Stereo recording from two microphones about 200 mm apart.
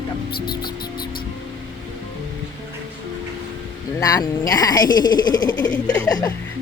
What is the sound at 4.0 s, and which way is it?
Speech, 20° left (ahead or behind).